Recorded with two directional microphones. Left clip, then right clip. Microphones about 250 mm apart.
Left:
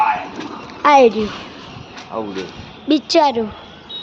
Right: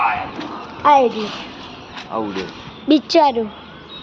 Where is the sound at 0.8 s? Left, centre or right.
Left.